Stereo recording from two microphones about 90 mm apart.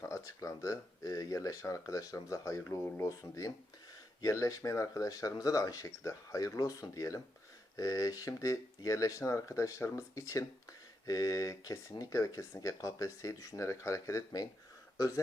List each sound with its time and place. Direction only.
0.0 s speech: 35° left (ahead or behind)